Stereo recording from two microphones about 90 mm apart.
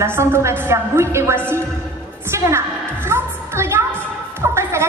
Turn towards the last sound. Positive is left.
turn(degrees=-30)  # may be behind; listen again after turning